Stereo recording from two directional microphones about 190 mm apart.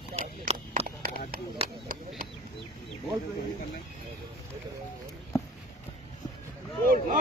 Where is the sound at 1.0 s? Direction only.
50° right (ahead or behind).